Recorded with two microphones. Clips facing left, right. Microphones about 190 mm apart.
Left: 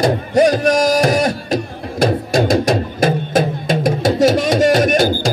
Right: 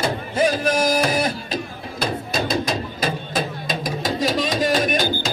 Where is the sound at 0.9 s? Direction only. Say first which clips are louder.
Left 6 dB; 45° left (ahead or behind).